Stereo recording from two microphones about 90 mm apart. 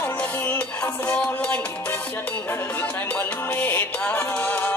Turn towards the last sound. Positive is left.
turn(degrees=15)  # may be behind; listen again after turning